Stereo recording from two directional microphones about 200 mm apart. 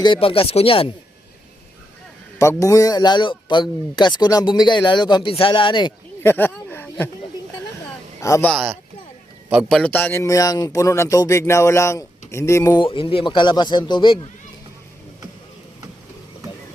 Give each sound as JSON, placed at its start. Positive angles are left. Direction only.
{"t": 0.0, "sound": "speech", "side_deg": 25}
{"t": 2.4, "sound": "speech", "side_deg": 15}
{"t": 6.2, "sound": "a sound", "side_deg": 10}
{"t": 8.2, "sound": "a man's voice", "side_deg": 10}
{"t": 9.5, "sound": "a man's voice", "side_deg": 0}